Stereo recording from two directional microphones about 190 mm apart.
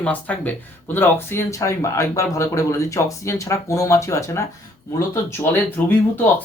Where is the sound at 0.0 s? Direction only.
10° left (ahead or behind).